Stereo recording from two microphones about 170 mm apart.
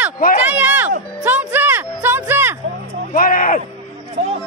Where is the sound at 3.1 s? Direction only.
55° left (ahead or behind).